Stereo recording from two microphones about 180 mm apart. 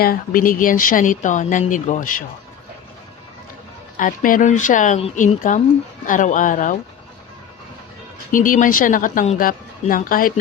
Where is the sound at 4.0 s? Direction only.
50° left (ahead or behind).